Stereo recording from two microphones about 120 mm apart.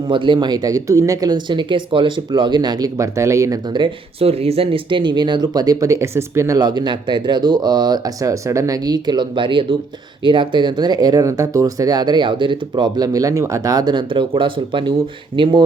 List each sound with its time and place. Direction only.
0.1 s speech: 40° right (ahead or behind); by 3.6 s 25° right (ahead or behind)
3.7 s speech: 40° right (ahead or behind)
4.3 s speech: 55° right (ahead or behind)